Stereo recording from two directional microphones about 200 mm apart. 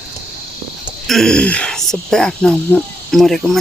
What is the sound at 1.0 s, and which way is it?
Speech, centre (ahead or behind).